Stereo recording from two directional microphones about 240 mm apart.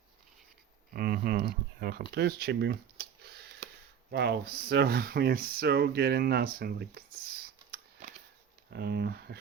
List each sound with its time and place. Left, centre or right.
0.9 s speech: right
8.7 s speech: right